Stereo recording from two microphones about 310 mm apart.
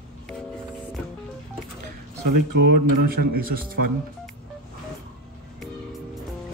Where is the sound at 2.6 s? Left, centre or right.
Right.